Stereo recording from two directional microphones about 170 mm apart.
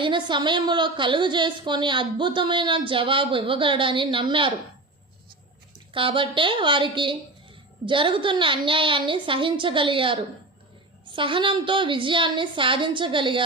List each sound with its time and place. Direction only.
0.0 s a woman's voice: 30° right (ahead or behind)
5.9 s a woman's voice: 30° right (ahead or behind)